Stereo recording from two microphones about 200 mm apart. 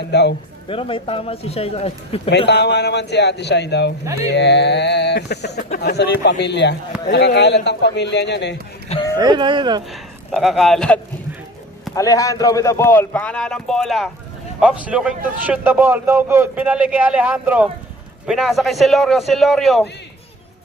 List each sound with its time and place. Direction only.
0.1 s speech: 60° left (ahead or behind)
0.7 s speech: 25° left (ahead or behind)
2.5 s speech: 60° left (ahead or behind)
5.5 s speech: 40° left (ahead or behind); by 8.5 s 60° left (ahead or behind)
9.1 s speech: 20° right (ahead or behind)
9.9 s speech: centre (ahead or behind)
11.9 s a man's voice: 15° left (ahead or behind); by 19.9 s centre (ahead or behind)